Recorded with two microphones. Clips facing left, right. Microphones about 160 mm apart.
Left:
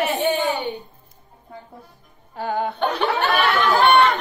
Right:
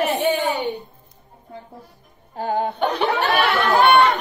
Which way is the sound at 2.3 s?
40° right (ahead or behind).